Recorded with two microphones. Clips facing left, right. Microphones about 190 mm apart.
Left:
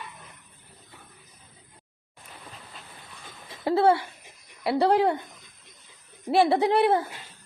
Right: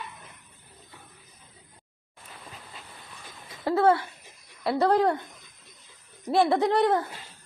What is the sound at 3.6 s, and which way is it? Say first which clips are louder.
Speech: left 1 dB; 25° left (ahead or behind).